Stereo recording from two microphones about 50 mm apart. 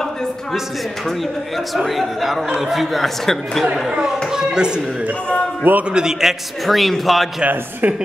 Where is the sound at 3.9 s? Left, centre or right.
Centre.